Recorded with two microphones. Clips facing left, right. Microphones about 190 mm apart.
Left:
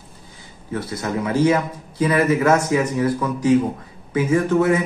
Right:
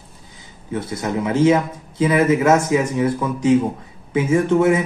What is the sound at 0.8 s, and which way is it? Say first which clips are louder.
A man's voice: right 2 dB; 25° right (ahead or behind).